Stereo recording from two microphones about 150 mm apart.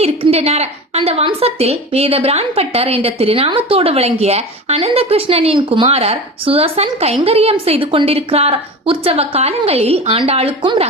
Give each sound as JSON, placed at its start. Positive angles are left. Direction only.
{"t": 0.0, "sound": "a woman's voice", "side_deg": -45}